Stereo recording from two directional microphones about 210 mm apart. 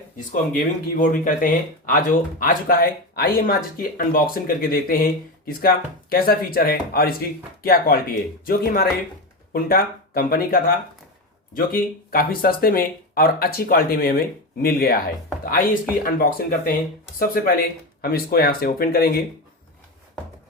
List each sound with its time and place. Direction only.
0.5 s speech: 40° left (ahead or behind)